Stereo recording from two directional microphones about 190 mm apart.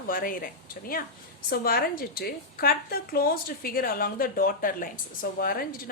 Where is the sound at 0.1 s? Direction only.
50° left (ahead or behind).